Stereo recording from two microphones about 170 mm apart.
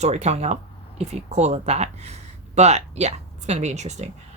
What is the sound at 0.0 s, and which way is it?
A woman's voice, 40° right (ahead or behind).